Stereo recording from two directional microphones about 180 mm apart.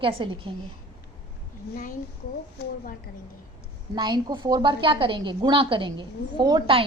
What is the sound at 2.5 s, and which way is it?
Speech, 60° left (ahead or behind).